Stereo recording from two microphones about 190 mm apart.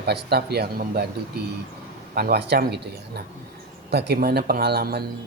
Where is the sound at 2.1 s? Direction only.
55° right (ahead or behind).